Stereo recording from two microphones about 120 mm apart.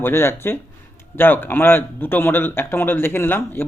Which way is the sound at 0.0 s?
20° left (ahead or behind).